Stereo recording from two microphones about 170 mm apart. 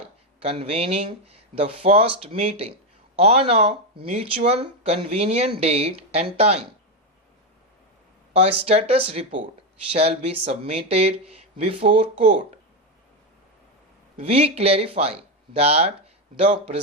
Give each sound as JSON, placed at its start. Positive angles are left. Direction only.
{"t": 0.4, "sound": "speech", "side_deg": -35}
{"t": 8.3, "sound": "speech", "side_deg": -35}
{"t": 14.2, "sound": "speech", "side_deg": -35}